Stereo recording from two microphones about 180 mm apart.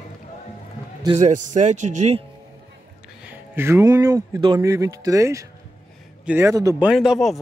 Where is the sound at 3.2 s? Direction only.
10° right (ahead or behind).